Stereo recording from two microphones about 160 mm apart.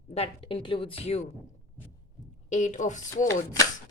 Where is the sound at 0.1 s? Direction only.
35° left (ahead or behind).